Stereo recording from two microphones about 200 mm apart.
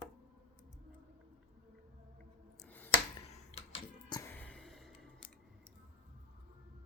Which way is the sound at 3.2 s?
30° left (ahead or behind).